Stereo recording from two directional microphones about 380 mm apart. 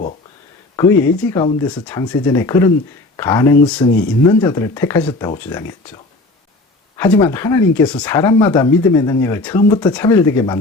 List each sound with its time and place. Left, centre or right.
0.8 s speech: centre
6.9 s speech: centre